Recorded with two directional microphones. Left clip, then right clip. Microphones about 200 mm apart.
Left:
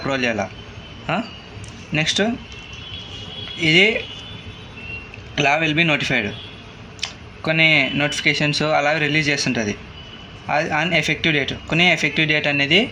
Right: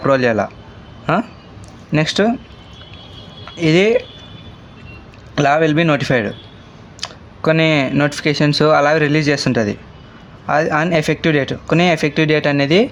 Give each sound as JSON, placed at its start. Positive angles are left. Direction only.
{"t": 0.0, "sound": "speech", "side_deg": -55}
{"t": 3.6, "sound": "speech", "side_deg": -55}
{"t": 5.3, "sound": "speech", "side_deg": -60}